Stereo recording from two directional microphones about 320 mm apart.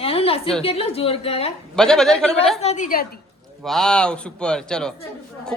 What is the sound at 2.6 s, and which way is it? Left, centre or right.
Speech, left.